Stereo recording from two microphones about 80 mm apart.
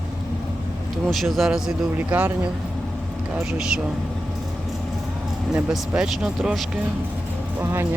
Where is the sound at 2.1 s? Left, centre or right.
Centre.